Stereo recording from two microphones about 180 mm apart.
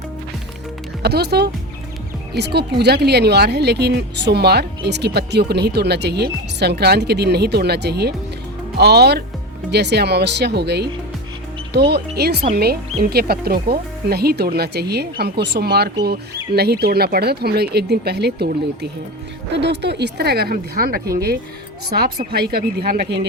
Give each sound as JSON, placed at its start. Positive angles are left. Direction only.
{"t": 1.0, "sound": "speech", "side_deg": -65}